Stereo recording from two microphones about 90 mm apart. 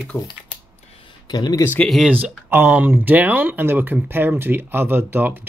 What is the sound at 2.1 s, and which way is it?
Speech, 20° right (ahead or behind).